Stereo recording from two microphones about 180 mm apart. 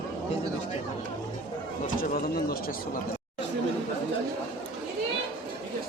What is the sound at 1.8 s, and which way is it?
Speech, 50° left (ahead or behind).